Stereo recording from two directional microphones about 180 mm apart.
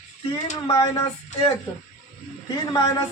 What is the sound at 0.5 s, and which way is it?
Speech, 20° left (ahead or behind).